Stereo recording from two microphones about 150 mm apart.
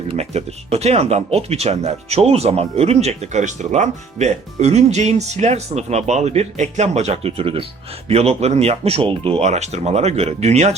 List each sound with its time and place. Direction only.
0.1 s speech: 45° right (ahead or behind)